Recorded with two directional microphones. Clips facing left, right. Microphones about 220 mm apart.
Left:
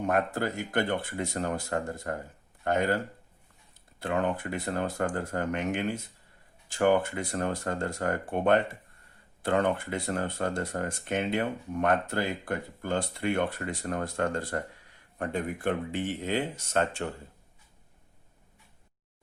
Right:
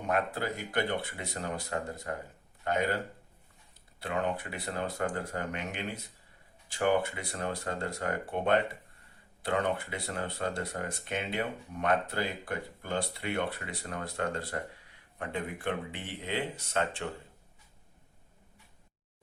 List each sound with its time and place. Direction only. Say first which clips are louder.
0.1 s speech: left 1 dB; 50° left (ahead or behind)
4.0 s speech: left 4 dB; 50° left (ahead or behind)